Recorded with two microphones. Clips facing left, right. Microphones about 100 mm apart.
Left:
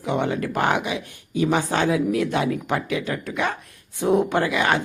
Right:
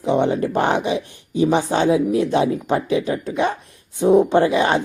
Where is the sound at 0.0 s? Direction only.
25° right (ahead or behind).